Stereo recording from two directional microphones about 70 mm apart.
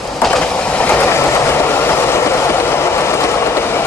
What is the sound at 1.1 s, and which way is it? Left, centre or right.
Train, left.